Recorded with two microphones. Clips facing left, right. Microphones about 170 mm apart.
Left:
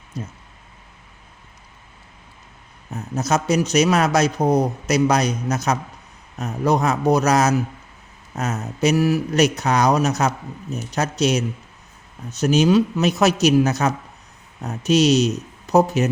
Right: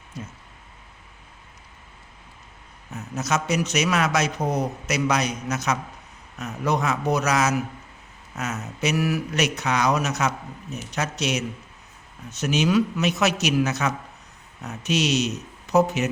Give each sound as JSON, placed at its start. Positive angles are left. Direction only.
{"t": 0.1, "sound": "speech", "side_deg": 40}
{"t": 2.9, "sound": "speech", "side_deg": 35}